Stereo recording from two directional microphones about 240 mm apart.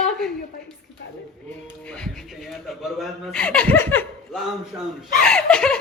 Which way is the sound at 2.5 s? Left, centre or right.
Centre.